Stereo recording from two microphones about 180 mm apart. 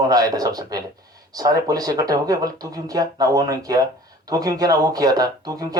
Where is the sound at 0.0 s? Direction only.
20° right (ahead or behind).